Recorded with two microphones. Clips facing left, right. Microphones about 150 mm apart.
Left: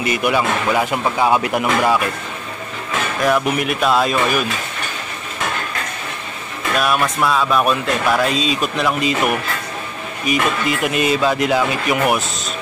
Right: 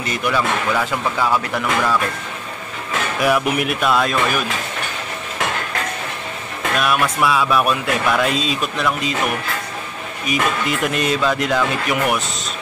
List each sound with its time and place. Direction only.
0.0 s speech: 10° left (ahead or behind)
3.2 s speech: 10° right (ahead or behind)
6.8 s speech: centre (ahead or behind)
10.2 s speech: centre (ahead or behind)